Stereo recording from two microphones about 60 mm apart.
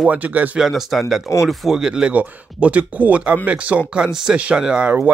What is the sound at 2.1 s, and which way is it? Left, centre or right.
Speech, right.